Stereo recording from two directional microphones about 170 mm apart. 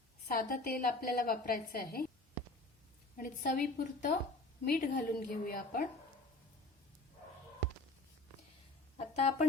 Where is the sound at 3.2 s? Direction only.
50° left (ahead or behind).